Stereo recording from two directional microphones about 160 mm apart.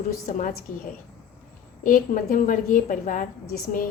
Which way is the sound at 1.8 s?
60° left (ahead or behind).